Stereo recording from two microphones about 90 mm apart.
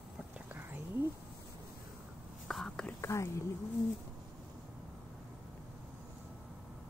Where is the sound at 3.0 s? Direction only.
35° left (ahead or behind).